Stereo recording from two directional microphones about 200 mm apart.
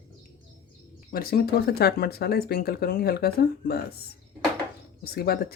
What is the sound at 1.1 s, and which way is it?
Speech, 50° left (ahead or behind).